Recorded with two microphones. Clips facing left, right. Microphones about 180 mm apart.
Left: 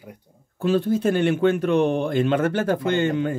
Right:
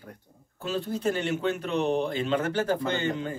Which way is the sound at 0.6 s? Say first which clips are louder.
Left 10 dB; 55° left (ahead or behind).